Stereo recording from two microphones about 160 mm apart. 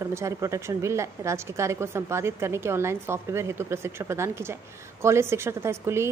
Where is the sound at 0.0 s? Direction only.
20° right (ahead or behind).